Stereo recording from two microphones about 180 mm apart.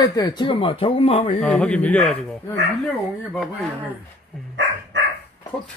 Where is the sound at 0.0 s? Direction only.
20° left (ahead or behind).